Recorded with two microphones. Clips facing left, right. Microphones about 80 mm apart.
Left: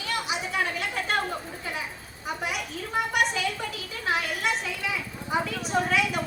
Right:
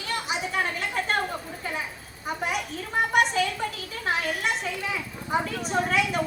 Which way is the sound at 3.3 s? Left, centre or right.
Right.